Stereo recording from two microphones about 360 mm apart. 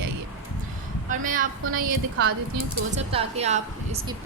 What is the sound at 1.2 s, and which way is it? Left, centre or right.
A woman's voice, right.